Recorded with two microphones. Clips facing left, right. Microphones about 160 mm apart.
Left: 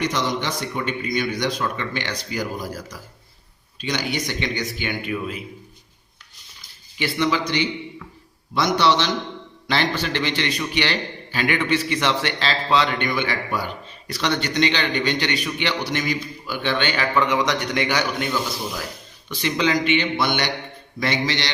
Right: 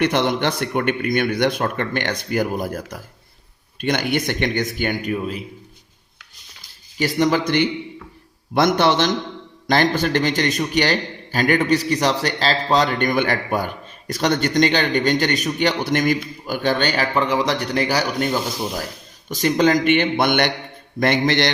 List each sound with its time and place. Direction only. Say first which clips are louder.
0.0 s a man's voice: right 5 dB; 60° right (ahead or behind); by 5.4 s 35° right (ahead or behind)
7.0 s a man's voice: right 4 dB; 45° right (ahead or behind)